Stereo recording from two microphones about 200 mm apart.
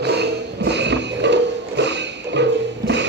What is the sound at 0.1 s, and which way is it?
Music, 60° right (ahead or behind).